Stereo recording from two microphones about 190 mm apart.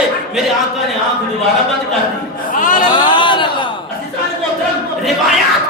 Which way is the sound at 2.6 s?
45° left (ahead or behind).